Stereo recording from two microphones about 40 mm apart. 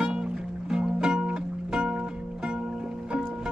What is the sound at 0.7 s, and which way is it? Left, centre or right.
Music, centre.